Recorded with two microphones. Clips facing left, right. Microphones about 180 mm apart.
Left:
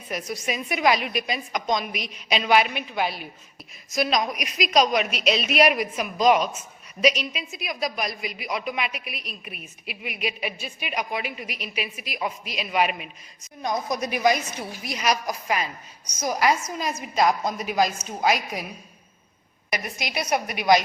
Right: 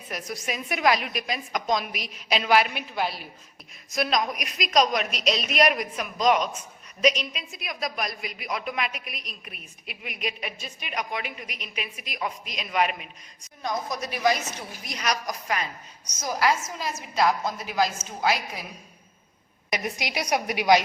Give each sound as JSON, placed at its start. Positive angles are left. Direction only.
{"t": 0.1, "sound": "a woman's voice", "side_deg": 0}
{"t": 14.8, "sound": "a woman's voice", "side_deg": 5}
{"t": 19.7, "sound": "a woman's voice", "side_deg": -15}